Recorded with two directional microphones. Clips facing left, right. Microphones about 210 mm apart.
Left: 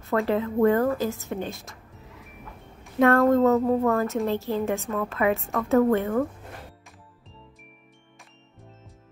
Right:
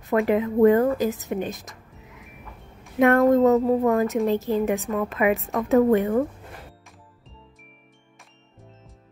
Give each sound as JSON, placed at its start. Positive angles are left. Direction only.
{"t": 0.0, "sound": "a woman's voice", "side_deg": -15}